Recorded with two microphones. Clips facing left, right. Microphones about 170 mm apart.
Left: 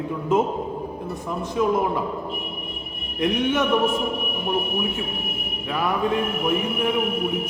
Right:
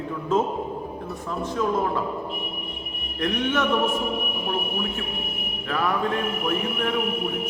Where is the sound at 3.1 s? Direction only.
15° left (ahead or behind).